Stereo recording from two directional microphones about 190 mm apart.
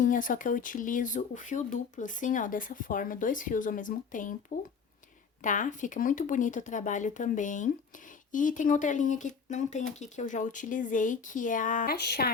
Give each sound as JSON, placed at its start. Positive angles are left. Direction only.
{"t": 0.0, "sound": "speech", "side_deg": 45}
{"t": 5.4, "sound": "speech", "side_deg": 40}
{"t": 11.9, "sound": "a sound", "side_deg": 60}